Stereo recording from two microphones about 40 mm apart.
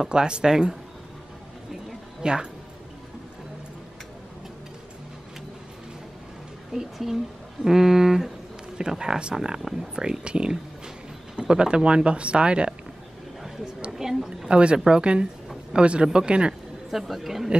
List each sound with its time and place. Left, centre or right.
0.0 s speech: right
2.2 s speech: right
6.7 s speech: centre; by 12.7 s right
13.9 s a woman's voice: centre
14.5 s speech: right
16.9 s speech: centre